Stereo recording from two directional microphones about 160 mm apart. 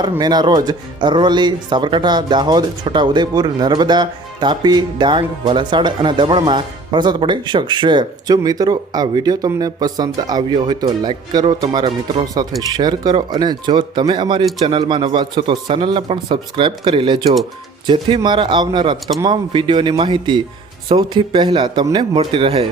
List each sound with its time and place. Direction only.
0.2 s a man's voice: 25° right (ahead or behind)